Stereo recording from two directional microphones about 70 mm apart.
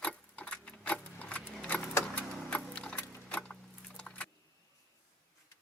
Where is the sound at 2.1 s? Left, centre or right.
Centre.